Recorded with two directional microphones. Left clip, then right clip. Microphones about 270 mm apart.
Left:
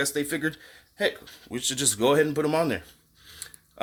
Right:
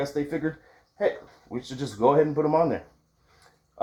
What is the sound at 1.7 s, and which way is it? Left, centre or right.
Speech, left.